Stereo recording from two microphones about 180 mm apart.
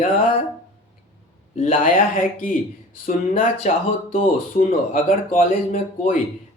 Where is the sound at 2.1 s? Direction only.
50° left (ahead or behind).